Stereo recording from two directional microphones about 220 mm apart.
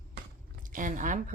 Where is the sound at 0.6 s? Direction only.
35° right (ahead or behind).